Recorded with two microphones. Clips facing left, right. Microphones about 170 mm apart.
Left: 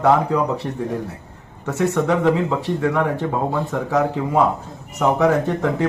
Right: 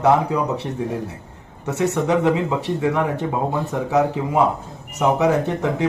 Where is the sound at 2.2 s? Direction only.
10° right (ahead or behind).